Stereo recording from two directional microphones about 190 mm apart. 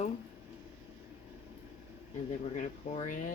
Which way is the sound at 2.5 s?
40° left (ahead or behind).